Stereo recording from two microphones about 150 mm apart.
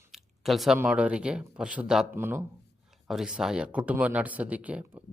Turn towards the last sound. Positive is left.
turn(degrees=-10)  # may be behind; listen again after turning